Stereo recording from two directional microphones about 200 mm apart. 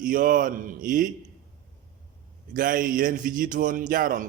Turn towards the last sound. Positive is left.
turn(degrees=-45)  # may be behind; listen again after turning